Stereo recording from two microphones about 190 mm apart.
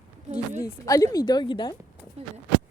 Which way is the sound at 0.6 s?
20° left (ahead or behind).